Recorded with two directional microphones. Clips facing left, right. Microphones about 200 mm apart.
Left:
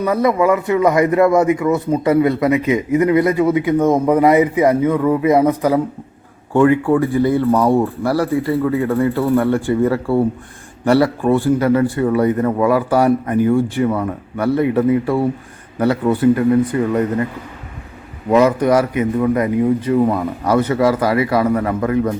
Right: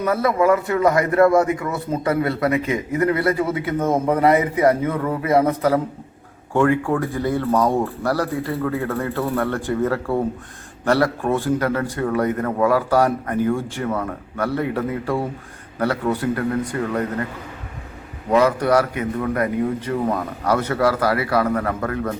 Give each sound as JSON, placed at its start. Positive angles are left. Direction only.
{"t": 0.0, "sound": "a man's voice", "side_deg": 15}
{"t": 18.3, "sound": "a man's voice", "side_deg": 15}